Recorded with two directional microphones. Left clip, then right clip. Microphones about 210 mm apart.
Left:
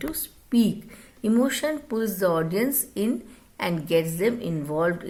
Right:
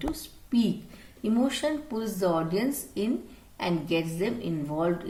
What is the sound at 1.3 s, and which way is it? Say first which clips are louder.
Speech: left 3 dB; 50° left (ahead or behind).